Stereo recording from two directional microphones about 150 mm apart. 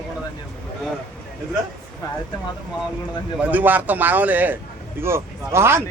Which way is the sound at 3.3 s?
10° right (ahead or behind).